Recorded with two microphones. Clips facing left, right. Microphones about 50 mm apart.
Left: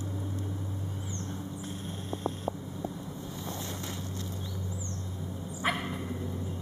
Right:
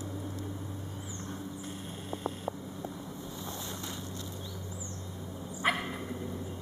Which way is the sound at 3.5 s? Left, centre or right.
Left.